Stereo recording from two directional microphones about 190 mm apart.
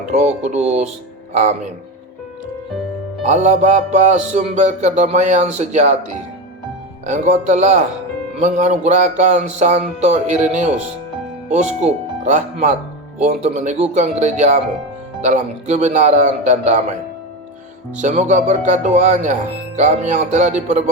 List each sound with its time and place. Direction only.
0.0 s speech: 35° right (ahead or behind)
3.2 s speech: 40° right (ahead or behind)
7.0 s speech: 40° right (ahead or behind)
18.0 s speech: 35° right (ahead or behind)